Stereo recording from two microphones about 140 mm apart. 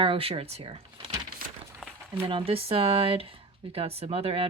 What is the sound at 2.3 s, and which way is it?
Speech, 45° right (ahead or behind).